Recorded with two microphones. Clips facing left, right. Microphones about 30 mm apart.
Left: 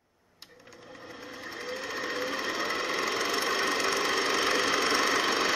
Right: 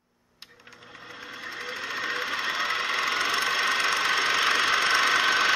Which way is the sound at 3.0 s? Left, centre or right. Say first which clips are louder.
Right 4 dB; right.